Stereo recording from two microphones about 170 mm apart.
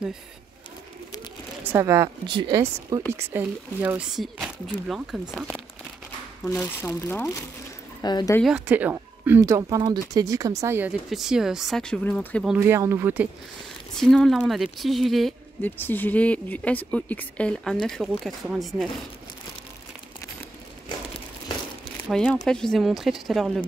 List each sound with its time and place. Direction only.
1.6 s speech: 15° right (ahead or behind)
2.2 s speech: 25° right (ahead or behind)
3.1 s speech: 10° right (ahead or behind)
6.5 s speech: 10° left (ahead or behind)
8.0 s speech: 25° left (ahead or behind)
8.4 s speech: 5° right (ahead or behind)
11.1 s speech: centre (ahead or behind)
12.5 s speech: 15° right (ahead or behind)
13.9 s speech: centre (ahead or behind)
15.6 s speech: 10° left (ahead or behind)
22.1 s speech: 5° left (ahead or behind)